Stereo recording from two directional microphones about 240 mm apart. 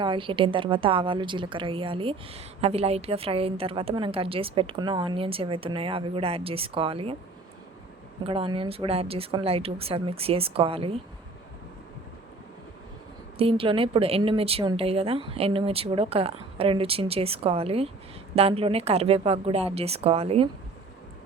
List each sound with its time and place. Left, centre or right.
0.0 s a woman's voice: right
8.3 s a woman's voice: right
13.4 s a woman's voice: right